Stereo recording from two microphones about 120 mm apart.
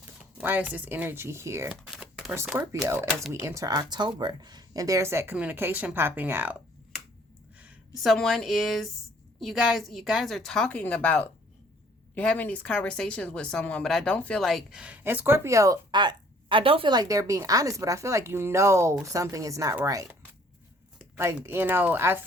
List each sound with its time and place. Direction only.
0.3 s a sound: 15° right (ahead or behind)
0.7 s speech: 15° right (ahead or behind)
2.8 s speech: 20° right (ahead or behind)
7.9 s a woman's voice: centre (ahead or behind)
15.0 s speech: 15° right (ahead or behind)
16.0 s speech: 40° right (ahead or behind)
16.9 s speech: 30° right (ahead or behind)
21.4 s speech: 20° right (ahead or behind)